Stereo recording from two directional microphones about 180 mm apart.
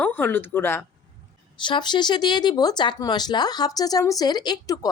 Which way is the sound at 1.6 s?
25° left (ahead or behind).